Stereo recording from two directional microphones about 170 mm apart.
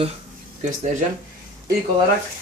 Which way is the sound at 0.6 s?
45° right (ahead or behind).